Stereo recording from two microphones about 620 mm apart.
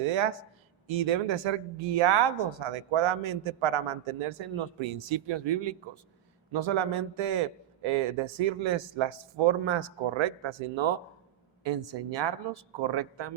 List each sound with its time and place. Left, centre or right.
0.9 s speech: right